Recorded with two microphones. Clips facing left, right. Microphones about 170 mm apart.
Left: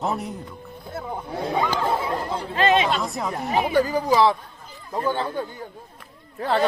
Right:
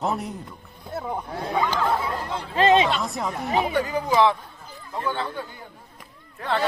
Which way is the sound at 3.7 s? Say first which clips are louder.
Left 3 dB; 35° left (ahead or behind).